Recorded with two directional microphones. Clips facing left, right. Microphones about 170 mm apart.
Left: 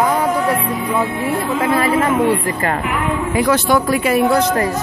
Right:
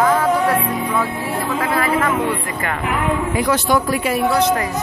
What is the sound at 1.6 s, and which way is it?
Speech, 25° left (ahead or behind).